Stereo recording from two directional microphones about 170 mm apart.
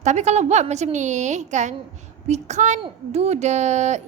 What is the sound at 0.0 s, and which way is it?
Speech, 45° right (ahead or behind).